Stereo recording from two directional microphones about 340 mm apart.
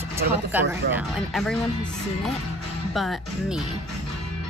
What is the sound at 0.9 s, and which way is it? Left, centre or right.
Speech, centre.